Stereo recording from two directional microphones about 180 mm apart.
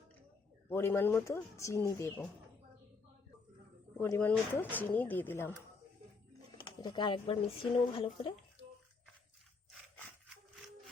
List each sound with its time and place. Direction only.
0.7 s speech: 15° left (ahead or behind)
3.9 s speech: 10° left (ahead or behind)
6.7 s speech: 25° left (ahead or behind)